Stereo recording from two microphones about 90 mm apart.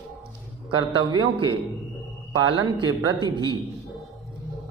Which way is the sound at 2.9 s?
55° right (ahead or behind).